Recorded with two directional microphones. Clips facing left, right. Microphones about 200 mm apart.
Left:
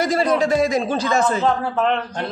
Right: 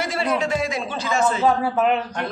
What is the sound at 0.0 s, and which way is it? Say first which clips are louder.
A man's voice: left 5 dB; 40° left (ahead or behind).